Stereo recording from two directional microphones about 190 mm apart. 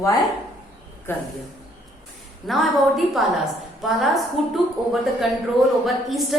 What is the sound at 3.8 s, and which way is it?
Speech, centre (ahead or behind).